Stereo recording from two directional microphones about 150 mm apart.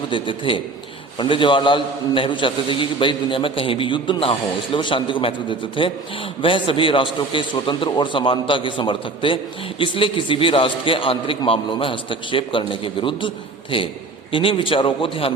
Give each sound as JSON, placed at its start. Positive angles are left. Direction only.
{"t": 0.1, "sound": "a man's voice", "side_deg": 35}